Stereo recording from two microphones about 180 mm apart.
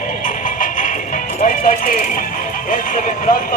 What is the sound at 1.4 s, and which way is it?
Music, 50° left (ahead or behind).